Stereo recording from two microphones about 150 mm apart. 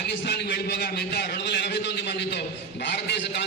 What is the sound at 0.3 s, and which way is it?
A man's voice, 90° left.